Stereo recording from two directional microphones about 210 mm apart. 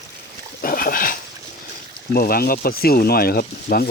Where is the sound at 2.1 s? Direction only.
45° left (ahead or behind).